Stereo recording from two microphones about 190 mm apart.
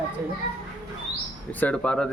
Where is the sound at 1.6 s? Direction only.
5° left (ahead or behind).